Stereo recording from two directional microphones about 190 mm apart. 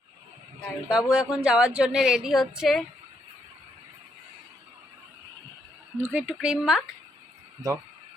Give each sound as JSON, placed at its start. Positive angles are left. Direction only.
{"t": 0.9, "sound": "a woman's voice", "side_deg": -5}
{"t": 6.0, "sound": "a woman's voice", "side_deg": -10}